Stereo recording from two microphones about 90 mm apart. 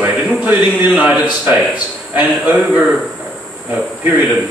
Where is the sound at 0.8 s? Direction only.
15° right (ahead or behind).